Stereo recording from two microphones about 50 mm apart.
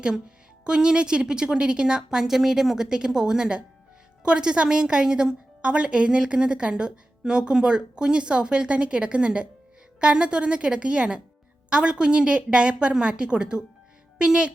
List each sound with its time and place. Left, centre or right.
0.6 s a woman's voice: centre